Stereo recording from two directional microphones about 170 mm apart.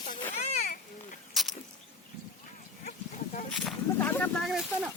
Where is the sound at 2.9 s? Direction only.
50° left (ahead or behind).